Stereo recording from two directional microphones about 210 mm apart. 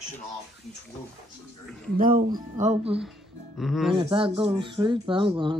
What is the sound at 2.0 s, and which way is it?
Speech, 40° right (ahead or behind).